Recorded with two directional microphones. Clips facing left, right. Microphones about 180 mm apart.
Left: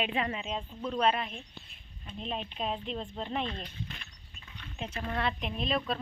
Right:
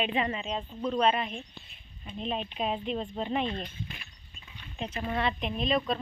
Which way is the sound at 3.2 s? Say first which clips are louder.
Right 3 dB; 5° right (ahead or behind).